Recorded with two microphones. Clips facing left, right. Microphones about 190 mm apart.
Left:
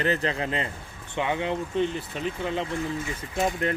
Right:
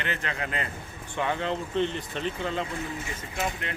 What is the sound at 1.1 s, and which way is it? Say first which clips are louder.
Speech: left 2 dB; 15° left (ahead or behind).